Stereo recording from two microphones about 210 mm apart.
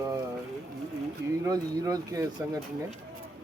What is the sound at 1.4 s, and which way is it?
Speech, 15° right (ahead or behind).